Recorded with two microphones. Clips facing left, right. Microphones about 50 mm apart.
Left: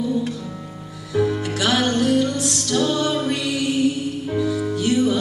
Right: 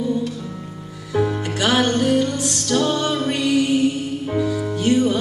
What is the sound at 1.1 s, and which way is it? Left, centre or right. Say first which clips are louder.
Music: even; centre.